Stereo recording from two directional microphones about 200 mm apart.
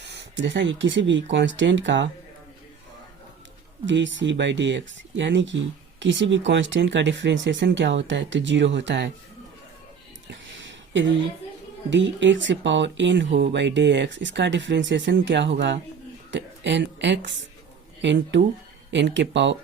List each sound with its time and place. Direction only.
0.0 s speech: 60° right (ahead or behind)
3.8 s speech: 65° right (ahead or behind)
10.2 s a sound: 65° right (ahead or behind)
11.9 s speech: 65° right (ahead or behind)